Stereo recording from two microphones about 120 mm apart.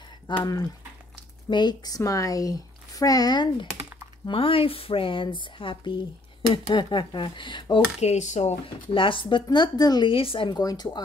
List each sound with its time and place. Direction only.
0.4 s speech: 30° left (ahead or behind)
4.3 s speech: 50° left (ahead or behind)
8.0 s speech: 70° left (ahead or behind)
8.6 s speech: 45° left (ahead or behind)
10.6 s speech: 35° left (ahead or behind)